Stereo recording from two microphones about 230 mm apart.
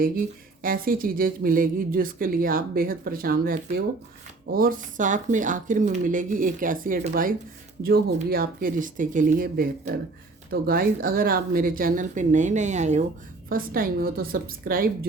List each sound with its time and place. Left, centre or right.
0.6 s a woman's voice: right